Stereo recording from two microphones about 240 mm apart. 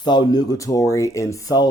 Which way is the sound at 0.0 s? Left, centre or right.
Centre.